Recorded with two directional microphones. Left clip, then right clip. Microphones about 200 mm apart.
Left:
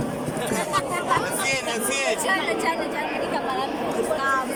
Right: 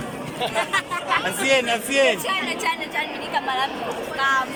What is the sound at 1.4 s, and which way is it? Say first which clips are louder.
Speech: right 5 dB; 40° right (ahead or behind).